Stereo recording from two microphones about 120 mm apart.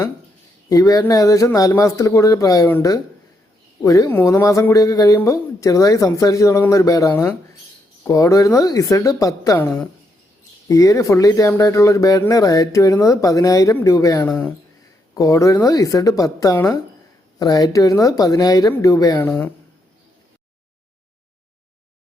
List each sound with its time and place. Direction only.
0.7 s speech: 30° left (ahead or behind)
3.8 s speech: 30° left (ahead or behind)
10.7 s speech: 30° left (ahead or behind)
14.3 s speech: 10° left (ahead or behind)
15.1 s speech: 30° left (ahead or behind)
19.1 s speech: 15° left (ahead or behind)